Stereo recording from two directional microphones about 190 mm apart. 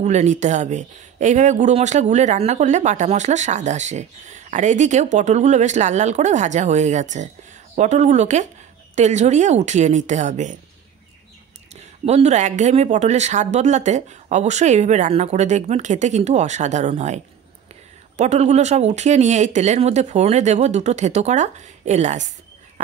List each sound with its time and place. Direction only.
0.0 s speech: 35° right (ahead or behind)
11.7 s speech: 35° right (ahead or behind)